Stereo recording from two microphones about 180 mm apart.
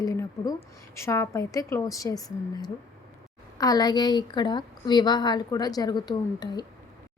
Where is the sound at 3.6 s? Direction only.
20° left (ahead or behind).